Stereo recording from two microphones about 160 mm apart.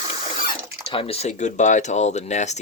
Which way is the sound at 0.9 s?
35° left (ahead or behind).